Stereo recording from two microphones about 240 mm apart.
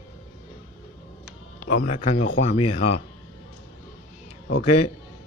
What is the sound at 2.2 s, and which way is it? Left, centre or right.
Speech, left.